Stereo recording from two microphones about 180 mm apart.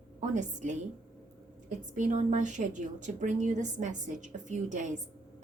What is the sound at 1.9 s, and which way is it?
A woman's voice, 45° right (ahead or behind).